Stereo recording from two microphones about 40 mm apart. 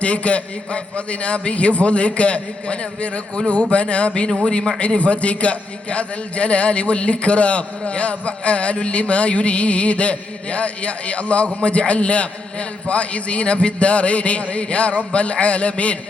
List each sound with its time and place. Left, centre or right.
0.0 s a man's voice: left